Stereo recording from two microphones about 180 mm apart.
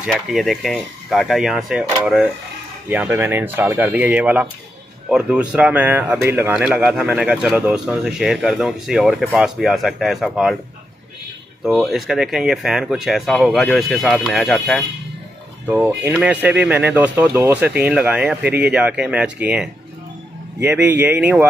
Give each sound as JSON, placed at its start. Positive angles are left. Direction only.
{"t": 0.0, "sound": "speech", "side_deg": 0}
{"t": 11.6, "sound": "speech", "side_deg": 0}
{"t": 15.6, "sound": "speech", "side_deg": -10}